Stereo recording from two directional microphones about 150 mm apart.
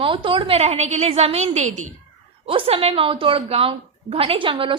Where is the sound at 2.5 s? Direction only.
35° right (ahead or behind).